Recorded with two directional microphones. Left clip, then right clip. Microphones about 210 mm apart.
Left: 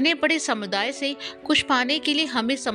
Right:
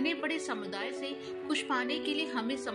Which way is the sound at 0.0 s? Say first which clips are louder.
Left 12 dB; 45° left (ahead or behind).